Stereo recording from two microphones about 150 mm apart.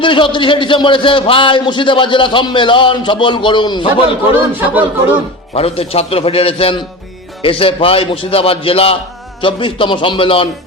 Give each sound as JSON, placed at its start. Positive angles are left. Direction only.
{"t": 0.0, "sound": "a man's voice", "side_deg": 35}
{"t": 4.4, "sound": "speech", "side_deg": -10}
{"t": 5.5, "sound": "a man's voice", "side_deg": 40}